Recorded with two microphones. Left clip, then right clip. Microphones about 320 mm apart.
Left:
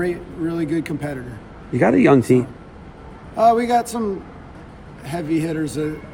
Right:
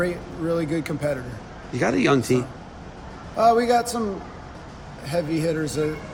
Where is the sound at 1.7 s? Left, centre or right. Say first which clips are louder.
Left 6 dB; centre.